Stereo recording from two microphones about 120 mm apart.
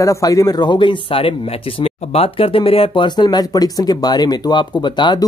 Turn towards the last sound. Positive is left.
turn(degrees=40)  # may be behind; listen again after turning